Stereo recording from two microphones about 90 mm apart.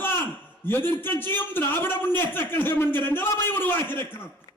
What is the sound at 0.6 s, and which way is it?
A man's voice, 25° left (ahead or behind).